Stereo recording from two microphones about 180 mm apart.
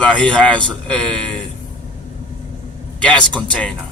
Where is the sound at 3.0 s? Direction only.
5° left (ahead or behind).